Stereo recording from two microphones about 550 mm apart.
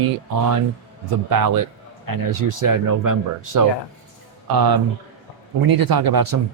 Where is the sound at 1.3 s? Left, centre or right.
Right.